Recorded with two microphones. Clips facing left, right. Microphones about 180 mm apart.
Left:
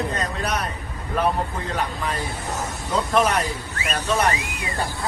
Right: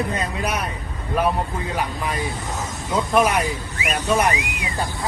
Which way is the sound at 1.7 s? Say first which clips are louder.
Right 1 dB; 15° right (ahead or behind).